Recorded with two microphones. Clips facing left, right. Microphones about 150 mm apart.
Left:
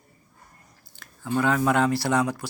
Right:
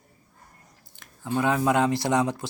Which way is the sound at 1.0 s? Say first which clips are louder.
Left 1 dB; 20° right (ahead or behind).